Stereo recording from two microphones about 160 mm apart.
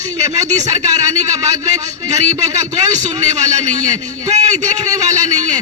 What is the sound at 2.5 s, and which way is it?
Speech, 20° right (ahead or behind).